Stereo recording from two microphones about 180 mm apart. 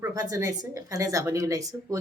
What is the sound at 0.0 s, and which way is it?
A woman's voice, 20° right (ahead or behind).